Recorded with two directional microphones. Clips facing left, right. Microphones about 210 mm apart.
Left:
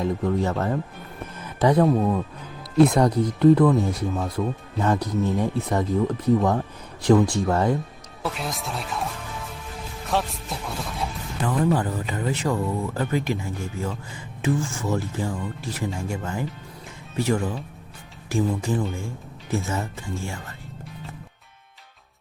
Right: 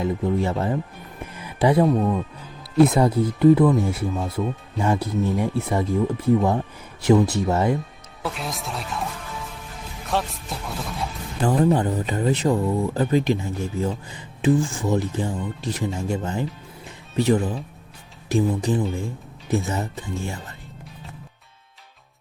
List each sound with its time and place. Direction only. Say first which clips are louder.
0.0 s speech: right 1 dB; 15° right (ahead or behind)
4.8 s speech: even; 10° right (ahead or behind)
10.1 s speech: even; centre (ahead or behind)
11.4 s speech: right 3 dB; 30° right (ahead or behind)
12.5 s speech: right 4 dB; 15° right (ahead or behind)
14.1 s a sound: right 5 dB; 20° right (ahead or behind)
14.7 s speech: right 3 dB; 15° right (ahead or behind)
18.7 s speech: right 3 dB; 20° right (ahead or behind)